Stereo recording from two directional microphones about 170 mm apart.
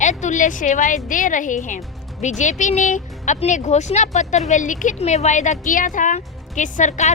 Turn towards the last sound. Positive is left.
turn(degrees=45)  # may be behind; listen again after turning